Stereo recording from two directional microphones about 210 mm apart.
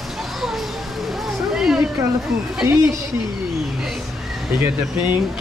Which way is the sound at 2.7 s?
15° right (ahead or behind).